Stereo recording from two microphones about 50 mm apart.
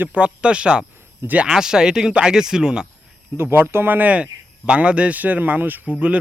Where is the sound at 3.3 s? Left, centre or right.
Right.